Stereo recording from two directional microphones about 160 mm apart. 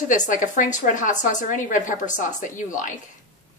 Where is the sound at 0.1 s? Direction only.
55° left (ahead or behind).